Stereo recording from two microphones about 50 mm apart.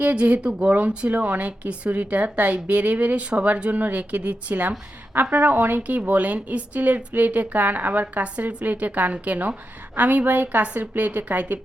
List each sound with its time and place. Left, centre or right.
0.0 s a woman's voice: right